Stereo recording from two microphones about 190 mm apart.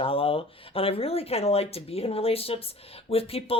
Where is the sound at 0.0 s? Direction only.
30° left (ahead or behind).